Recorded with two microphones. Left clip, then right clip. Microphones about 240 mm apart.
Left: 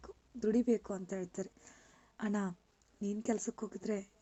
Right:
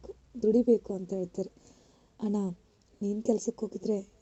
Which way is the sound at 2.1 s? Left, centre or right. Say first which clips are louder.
Right 5 dB; left.